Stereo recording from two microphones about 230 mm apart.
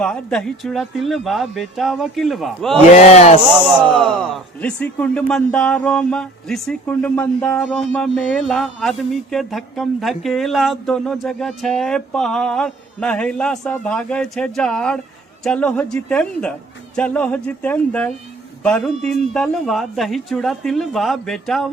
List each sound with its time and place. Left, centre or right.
0.0 s speech: centre
2.9 s speech: left
4.0 s speech: centre